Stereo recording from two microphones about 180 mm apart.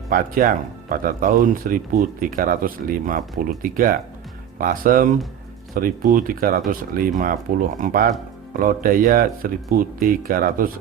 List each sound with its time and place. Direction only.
0.1 s speech: 50° right (ahead or behind)